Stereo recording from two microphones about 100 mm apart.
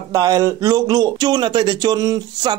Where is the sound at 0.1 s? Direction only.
35° right (ahead or behind).